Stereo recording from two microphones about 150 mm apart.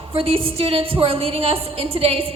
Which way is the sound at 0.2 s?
40° right (ahead or behind).